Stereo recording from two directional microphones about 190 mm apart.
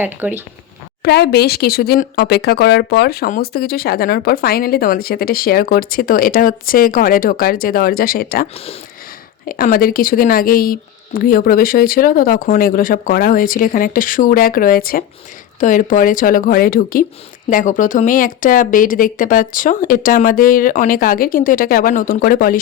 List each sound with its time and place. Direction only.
0.0 s speech: 10° right (ahead or behind)
1.0 s speech: 60° left (ahead or behind)
9.5 s speech: 50° left (ahead or behind)